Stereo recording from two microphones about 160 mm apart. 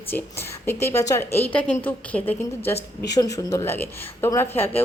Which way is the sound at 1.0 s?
20° left (ahead or behind).